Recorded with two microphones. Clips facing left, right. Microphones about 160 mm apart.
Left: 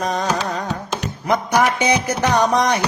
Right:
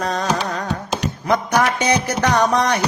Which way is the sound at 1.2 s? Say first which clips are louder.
Left 1 dB; 15° left (ahead or behind).